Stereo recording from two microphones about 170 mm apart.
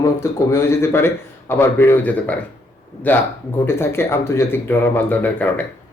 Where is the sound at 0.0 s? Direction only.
15° left (ahead or behind).